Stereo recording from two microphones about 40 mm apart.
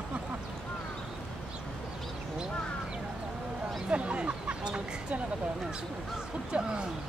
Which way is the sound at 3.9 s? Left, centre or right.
Right.